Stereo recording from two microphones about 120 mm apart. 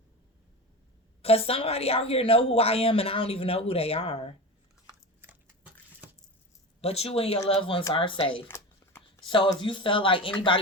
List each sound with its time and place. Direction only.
1.2 s a woman's voice: 55° left (ahead or behind)
4.9 s biting: 15° right (ahead or behind)
6.8 s a woman's voice: 60° left (ahead or behind)
8.4 s a sound: 20° left (ahead or behind)
9.2 s a woman's voice: 45° left (ahead or behind)